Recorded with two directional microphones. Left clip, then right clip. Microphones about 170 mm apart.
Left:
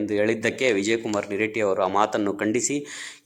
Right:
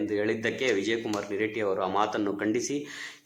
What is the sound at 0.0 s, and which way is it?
A man's voice, 25° left (ahead or behind).